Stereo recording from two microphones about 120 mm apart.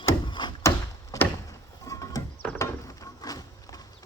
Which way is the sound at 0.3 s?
40° left (ahead or behind).